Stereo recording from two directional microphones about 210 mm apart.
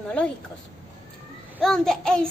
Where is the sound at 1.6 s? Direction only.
5° left (ahead or behind).